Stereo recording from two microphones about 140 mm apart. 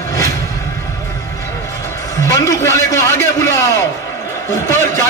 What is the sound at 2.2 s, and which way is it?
A man's voice, 25° left (ahead or behind).